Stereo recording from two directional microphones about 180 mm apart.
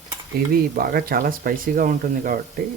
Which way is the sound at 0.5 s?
55° right (ahead or behind).